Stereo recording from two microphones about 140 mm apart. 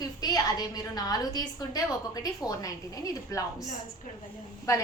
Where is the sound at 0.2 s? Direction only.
30° left (ahead or behind).